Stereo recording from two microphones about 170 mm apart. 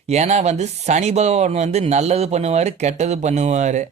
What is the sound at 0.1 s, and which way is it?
Speech, 40° right (ahead or behind).